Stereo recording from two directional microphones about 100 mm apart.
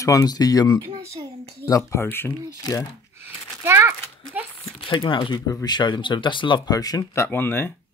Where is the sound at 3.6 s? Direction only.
20° right (ahead or behind).